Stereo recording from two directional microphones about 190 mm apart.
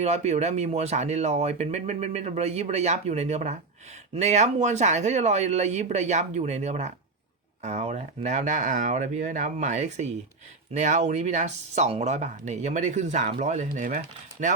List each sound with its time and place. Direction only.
0.0 s speech: 35° right (ahead or behind)